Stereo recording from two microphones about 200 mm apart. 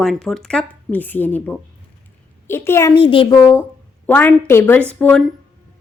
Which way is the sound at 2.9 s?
25° left (ahead or behind).